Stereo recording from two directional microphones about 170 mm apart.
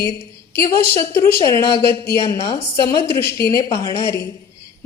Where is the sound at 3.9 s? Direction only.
25° right (ahead or behind).